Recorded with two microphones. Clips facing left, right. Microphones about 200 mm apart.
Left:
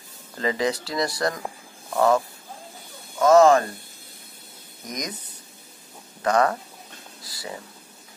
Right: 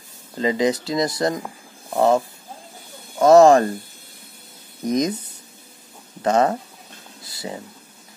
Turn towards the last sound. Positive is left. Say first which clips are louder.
# right 4 dB
turn(degrees=-25)  # may be behind; listen again after turning